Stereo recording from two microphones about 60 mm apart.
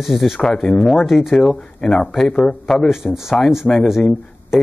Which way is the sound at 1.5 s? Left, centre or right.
Centre.